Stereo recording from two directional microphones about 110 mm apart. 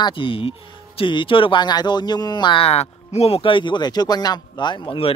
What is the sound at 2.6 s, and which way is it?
Speech, 70° left (ahead or behind).